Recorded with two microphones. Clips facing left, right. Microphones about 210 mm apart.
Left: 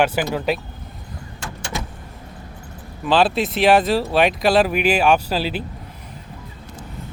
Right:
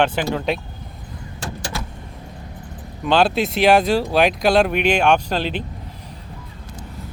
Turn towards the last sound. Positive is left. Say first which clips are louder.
# even
turn(degrees=5)  # may be behind; listen again after turning